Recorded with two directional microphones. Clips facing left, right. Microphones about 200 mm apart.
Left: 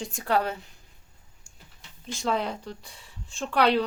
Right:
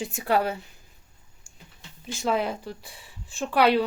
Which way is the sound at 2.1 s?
5° right (ahead or behind).